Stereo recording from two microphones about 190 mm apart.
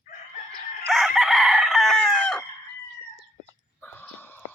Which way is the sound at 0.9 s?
Centre (ahead or behind).